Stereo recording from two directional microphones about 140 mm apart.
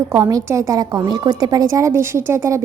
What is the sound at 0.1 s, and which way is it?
A woman's voice, 25° right (ahead or behind).